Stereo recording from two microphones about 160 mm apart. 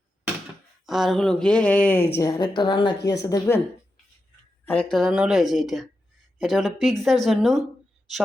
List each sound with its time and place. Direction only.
0.9 s speech: centre (ahead or behind)
2.1 s speech: 25° left (ahead or behind)
4.6 s speech: 10° left (ahead or behind)